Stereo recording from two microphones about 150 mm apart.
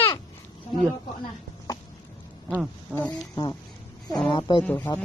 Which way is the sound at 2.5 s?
10° right (ahead or behind).